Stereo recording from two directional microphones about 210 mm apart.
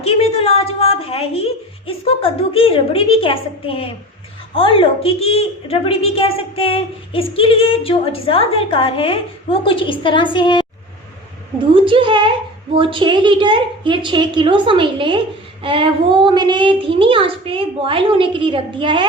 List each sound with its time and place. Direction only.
0.0 s a sound: 30° left (ahead or behind)
1.9 s a woman's voice: 25° left (ahead or behind)
11.7 s a child's voice: 25° right (ahead or behind)